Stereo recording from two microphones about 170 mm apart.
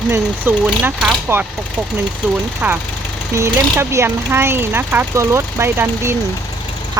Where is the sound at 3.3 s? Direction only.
15° right (ahead or behind).